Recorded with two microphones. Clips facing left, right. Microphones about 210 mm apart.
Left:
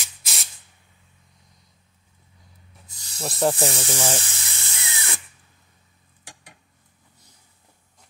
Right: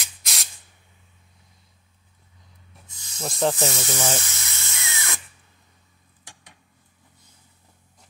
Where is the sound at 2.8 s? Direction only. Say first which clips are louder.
Even; 35° left (ahead or behind).